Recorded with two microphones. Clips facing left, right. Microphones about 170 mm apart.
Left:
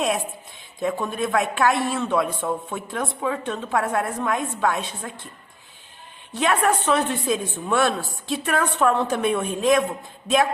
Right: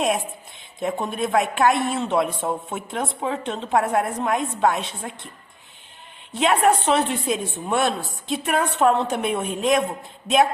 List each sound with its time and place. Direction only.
0.8 s a woman's voice: 20° right (ahead or behind)
6.3 s a woman's voice: 20° right (ahead or behind)